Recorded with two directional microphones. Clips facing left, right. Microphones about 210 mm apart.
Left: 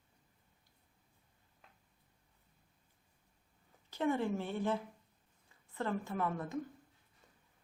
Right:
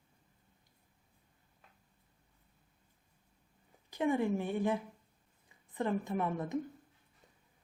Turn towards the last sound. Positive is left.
turn(degrees=-20)  # may be behind; listen again after turning